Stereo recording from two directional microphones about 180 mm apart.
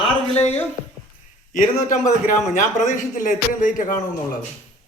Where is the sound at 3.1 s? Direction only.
45° left (ahead or behind).